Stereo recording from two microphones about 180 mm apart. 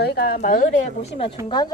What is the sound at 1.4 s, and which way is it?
Speech, 25° left (ahead or behind).